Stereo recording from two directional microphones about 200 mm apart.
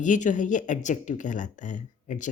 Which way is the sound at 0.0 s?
40° left (ahead or behind).